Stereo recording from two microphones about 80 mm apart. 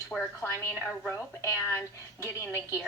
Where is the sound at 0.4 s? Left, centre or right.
Left.